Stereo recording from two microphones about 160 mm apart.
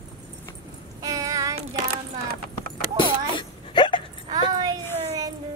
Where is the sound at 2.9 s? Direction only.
30° left (ahead or behind).